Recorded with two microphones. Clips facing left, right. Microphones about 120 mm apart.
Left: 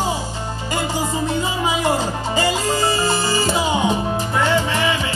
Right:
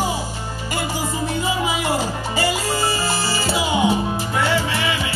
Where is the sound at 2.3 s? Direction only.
20° left (ahead or behind).